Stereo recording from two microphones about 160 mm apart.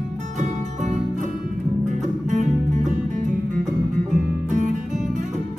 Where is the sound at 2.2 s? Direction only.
50° right (ahead or behind).